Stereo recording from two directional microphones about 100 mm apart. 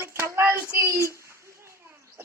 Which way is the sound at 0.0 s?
25° right (ahead or behind).